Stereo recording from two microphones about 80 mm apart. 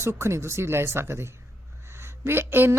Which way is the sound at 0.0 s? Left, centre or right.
Right.